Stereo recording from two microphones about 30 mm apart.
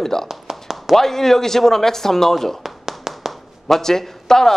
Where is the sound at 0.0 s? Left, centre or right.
Centre.